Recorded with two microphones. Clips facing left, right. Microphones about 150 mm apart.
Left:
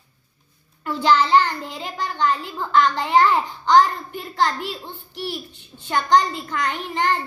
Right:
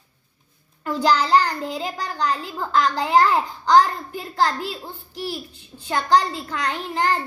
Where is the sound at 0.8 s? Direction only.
40° right (ahead or behind).